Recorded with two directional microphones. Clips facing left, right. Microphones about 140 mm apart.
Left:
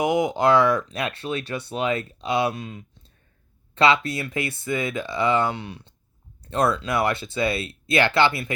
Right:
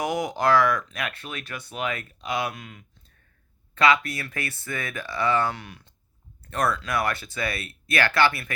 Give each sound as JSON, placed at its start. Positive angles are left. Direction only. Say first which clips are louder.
{"t": 0.0, "sound": "speech", "louder": "left 5 dB", "side_deg": 20}